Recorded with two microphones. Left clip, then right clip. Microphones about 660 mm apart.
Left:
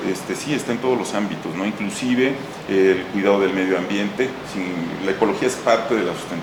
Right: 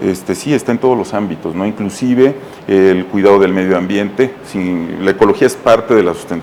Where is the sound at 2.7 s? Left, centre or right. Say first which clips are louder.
Right 7 dB; right.